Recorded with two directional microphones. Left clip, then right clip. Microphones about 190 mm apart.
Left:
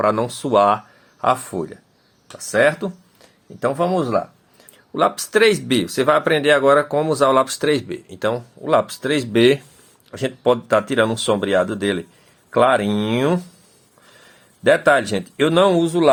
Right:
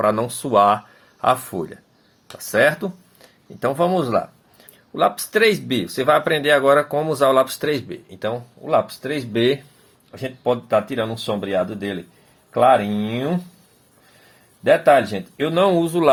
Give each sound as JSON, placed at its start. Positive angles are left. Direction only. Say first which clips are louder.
{"t": 0.0, "sound": "speech", "louder": "left 1 dB", "side_deg": 15}
{"t": 4.9, "sound": "speech", "louder": "left 1 dB", "side_deg": 20}
{"t": 10.1, "sound": "speech", "louder": "left 4 dB", "side_deg": 40}
{"t": 14.6, "sound": "speech", "louder": "right 1 dB", "side_deg": 40}